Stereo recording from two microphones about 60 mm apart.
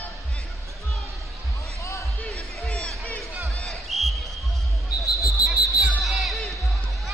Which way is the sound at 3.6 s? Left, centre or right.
Centre.